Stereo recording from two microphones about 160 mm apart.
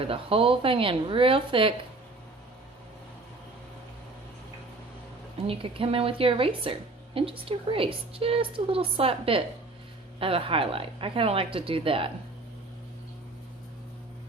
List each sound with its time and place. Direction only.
0.0 s speech: 35° right (ahead or behind)
5.4 s speech: 35° right (ahead or behind)